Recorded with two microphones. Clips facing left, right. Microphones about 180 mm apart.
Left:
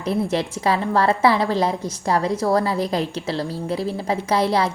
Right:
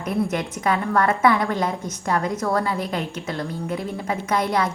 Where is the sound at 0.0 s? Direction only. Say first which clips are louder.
Left 2 dB; 30° left (ahead or behind).